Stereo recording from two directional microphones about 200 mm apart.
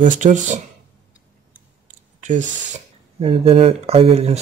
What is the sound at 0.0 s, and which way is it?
Speech, 40° right (ahead or behind).